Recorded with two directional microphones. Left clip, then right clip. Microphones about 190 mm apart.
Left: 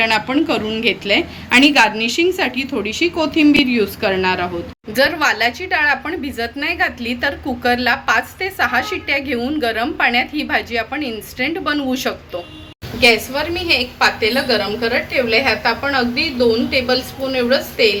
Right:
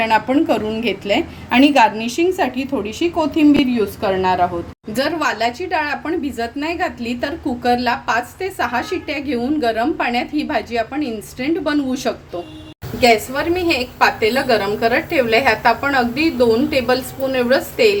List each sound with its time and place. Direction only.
0.0 s a woman's voice: 35° right (ahead or behind)
13.0 s a woman's voice: 55° right (ahead or behind)